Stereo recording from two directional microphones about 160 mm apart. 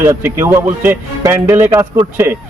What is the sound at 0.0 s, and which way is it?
Speech, 15° right (ahead or behind).